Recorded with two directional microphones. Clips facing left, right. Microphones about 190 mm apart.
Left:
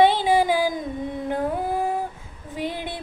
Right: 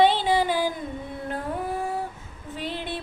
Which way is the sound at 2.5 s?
15° left (ahead or behind).